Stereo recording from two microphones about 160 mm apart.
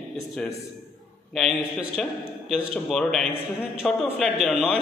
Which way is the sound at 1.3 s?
Centre (ahead or behind).